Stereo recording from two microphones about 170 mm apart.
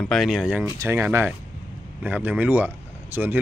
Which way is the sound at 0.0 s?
Centre (ahead or behind).